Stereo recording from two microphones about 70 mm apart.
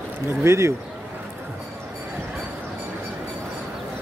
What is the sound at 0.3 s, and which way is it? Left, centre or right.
Speech, right.